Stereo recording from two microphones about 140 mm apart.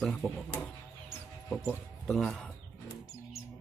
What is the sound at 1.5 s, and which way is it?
Speech, centre (ahead or behind).